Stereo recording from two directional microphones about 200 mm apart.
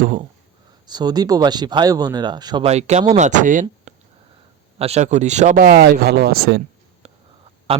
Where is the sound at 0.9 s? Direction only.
20° right (ahead or behind).